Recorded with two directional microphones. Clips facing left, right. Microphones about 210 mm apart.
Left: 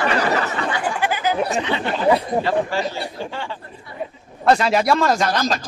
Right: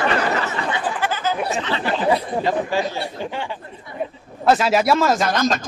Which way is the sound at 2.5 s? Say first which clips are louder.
Right 2 dB; 15° right (ahead or behind).